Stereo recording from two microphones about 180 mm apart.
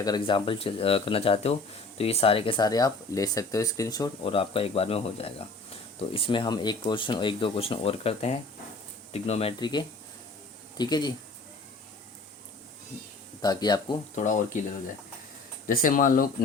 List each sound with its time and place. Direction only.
0.0 s speech: 25° left (ahead or behind)
13.4 s speech: 20° left (ahead or behind)
14.2 s speech: 45° left (ahead or behind)
15.6 s speech: 45° left (ahead or behind)